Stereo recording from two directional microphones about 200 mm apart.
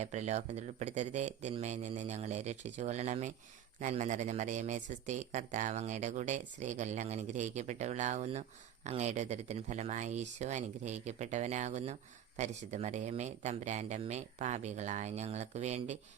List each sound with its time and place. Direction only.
0.0 s speech: 35° right (ahead or behind)